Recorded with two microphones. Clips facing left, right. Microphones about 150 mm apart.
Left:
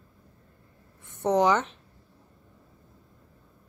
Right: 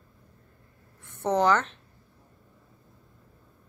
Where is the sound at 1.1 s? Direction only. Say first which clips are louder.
Left 1 dB; 15° left (ahead or behind).